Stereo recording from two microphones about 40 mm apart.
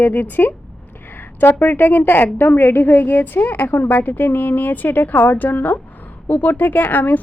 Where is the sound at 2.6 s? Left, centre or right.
Left.